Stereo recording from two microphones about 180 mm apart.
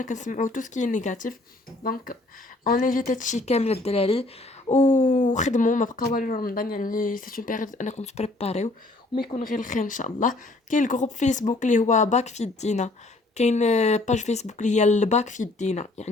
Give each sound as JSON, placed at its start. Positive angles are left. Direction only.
{"t": 0.0, "sound": "speech", "side_deg": 45}
{"t": 9.3, "sound": "speech", "side_deg": 45}